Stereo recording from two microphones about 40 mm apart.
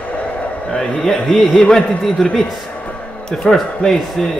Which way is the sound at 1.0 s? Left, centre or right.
Centre.